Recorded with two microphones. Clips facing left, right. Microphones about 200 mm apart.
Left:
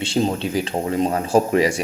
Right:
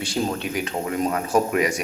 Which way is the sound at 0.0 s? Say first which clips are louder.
Left 4 dB; 25° left (ahead or behind).